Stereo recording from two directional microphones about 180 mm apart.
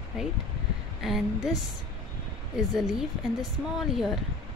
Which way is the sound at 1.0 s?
Centre (ahead or behind).